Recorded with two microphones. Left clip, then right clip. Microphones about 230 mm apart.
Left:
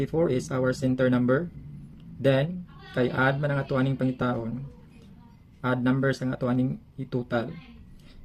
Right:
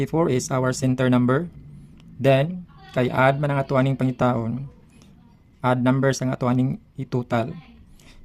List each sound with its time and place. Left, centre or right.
0.0 s speech: right
5.6 s speech: right